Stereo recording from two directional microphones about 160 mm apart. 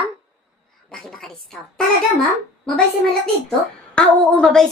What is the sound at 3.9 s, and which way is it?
Speech, 5° left (ahead or behind).